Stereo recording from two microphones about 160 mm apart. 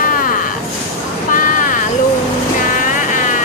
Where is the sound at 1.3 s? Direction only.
55° left (ahead or behind).